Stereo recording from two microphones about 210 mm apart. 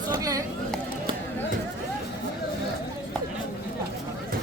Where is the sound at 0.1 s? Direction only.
15° right (ahead or behind).